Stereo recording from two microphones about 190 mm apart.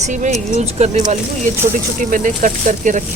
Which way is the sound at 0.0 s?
40° right (ahead or behind).